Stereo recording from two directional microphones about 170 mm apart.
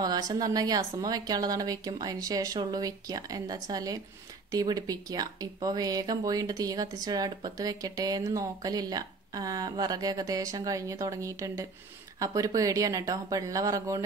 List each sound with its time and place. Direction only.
0.0 s speech: 25° right (ahead or behind)